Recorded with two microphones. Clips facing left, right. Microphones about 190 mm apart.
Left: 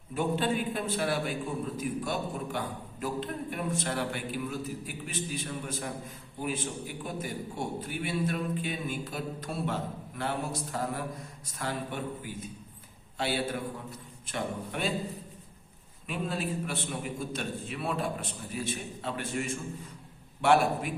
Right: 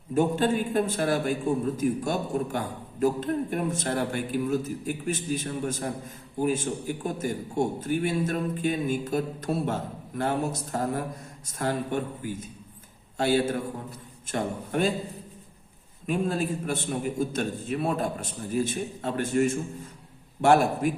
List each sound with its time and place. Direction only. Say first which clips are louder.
0.1 s a man's voice: right 6 dB; 45° right (ahead or behind)
16.0 s a man's voice: right 6 dB; 45° right (ahead or behind)